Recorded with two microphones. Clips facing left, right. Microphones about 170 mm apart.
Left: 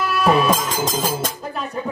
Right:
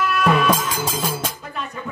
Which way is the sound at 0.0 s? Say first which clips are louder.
Left 1 dB; 35° left (ahead or behind).